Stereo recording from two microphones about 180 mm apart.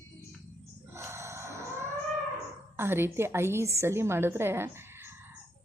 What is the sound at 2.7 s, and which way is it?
A woman's voice, 15° right (ahead or behind).